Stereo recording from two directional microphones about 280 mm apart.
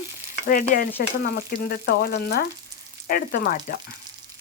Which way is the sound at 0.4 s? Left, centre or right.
Left.